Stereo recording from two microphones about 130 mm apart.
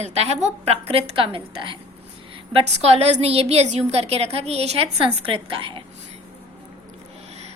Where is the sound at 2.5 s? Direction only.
55° right (ahead or behind).